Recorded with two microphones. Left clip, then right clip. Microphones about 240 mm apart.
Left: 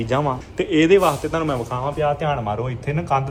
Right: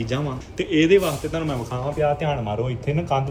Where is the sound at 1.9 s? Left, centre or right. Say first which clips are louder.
Even; left.